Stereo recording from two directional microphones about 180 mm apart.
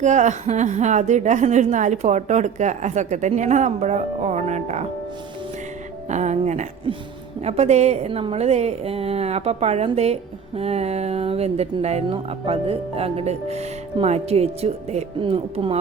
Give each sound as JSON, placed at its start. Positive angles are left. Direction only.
{"t": 0.0, "sound": "a woman's voice", "side_deg": -40}
{"t": 6.1, "sound": "a sound", "side_deg": -40}
{"t": 7.4, "sound": "a woman's voice", "side_deg": -35}